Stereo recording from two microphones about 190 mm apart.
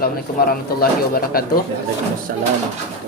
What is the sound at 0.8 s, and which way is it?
Speech, 50° left (ahead or behind).